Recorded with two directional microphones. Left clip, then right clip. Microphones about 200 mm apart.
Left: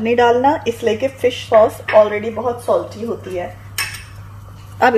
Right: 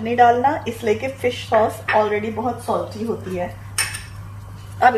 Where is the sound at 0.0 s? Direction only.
55° left (ahead or behind).